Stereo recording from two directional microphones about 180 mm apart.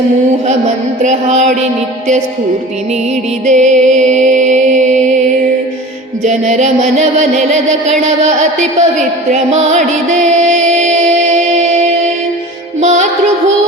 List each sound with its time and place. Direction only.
1.0 s music: 40° right (ahead or behind)
3.4 s music: 40° right (ahead or behind)
6.2 s music: 40° right (ahead or behind)
12.8 s music: 40° right (ahead or behind)